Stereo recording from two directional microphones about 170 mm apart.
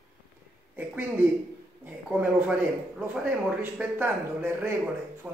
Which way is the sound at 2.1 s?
10° right (ahead or behind).